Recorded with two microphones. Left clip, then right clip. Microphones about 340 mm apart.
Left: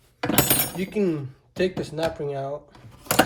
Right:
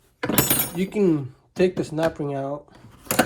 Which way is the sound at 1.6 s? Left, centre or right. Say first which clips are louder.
Right 3 dB; centre.